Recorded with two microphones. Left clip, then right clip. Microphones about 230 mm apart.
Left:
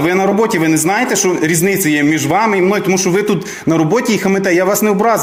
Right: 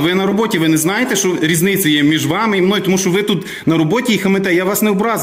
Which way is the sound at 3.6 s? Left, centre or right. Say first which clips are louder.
Left 1 dB; right.